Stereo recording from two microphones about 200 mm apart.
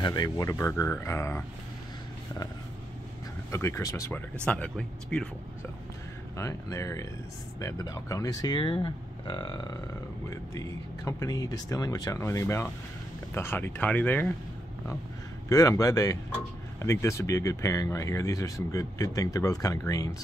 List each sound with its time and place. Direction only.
0.0 s speech: 20° left (ahead or behind)
3.5 s speech: 15° left (ahead or behind)
6.3 s speech: 15° left (ahead or behind)
15.4 s speech: 15° left (ahead or behind)